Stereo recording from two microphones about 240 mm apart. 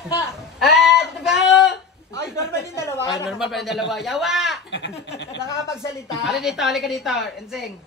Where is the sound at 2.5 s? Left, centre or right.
Centre.